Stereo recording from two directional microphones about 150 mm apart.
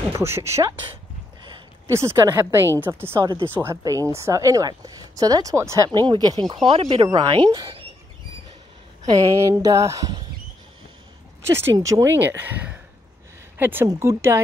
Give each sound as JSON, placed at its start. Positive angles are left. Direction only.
{"t": 0.1, "sound": "speech", "side_deg": -15}
{"t": 1.9, "sound": "speech", "side_deg": -20}
{"t": 7.1, "sound": "speech", "side_deg": -30}
{"t": 9.1, "sound": "speech", "side_deg": -20}
{"t": 11.4, "sound": "speech", "side_deg": -15}